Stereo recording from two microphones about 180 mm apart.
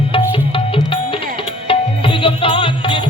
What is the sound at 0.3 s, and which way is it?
Music, 30° left (ahead or behind).